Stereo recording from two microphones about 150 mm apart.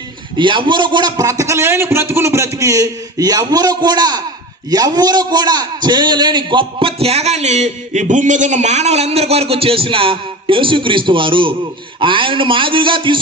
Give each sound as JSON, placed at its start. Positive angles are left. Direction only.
{"t": 0.3, "sound": "a man's voice", "side_deg": -30}